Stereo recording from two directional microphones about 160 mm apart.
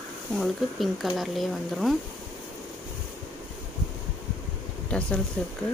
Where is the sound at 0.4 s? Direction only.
Centre (ahead or behind).